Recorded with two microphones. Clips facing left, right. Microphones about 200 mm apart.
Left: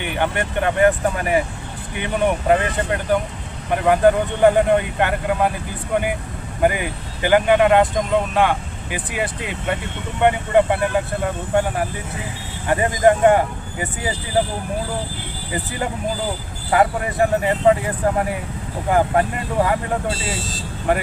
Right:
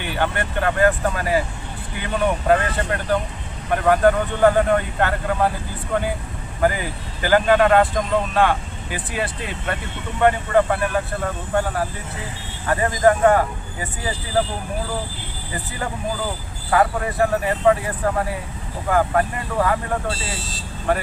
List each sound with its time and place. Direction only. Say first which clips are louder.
0.0 s speech: left 1 dB; 20° left (ahead or behind)
16.7 s speech: left 1 dB; 20° left (ahead or behind)